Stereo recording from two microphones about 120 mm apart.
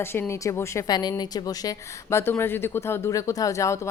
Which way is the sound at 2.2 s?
20° left (ahead or behind).